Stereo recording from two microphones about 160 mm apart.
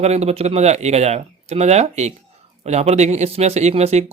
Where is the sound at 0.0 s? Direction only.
40° right (ahead or behind).